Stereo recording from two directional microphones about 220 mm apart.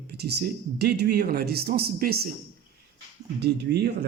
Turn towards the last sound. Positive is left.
turn(degrees=-50)  # may be behind; listen again after turning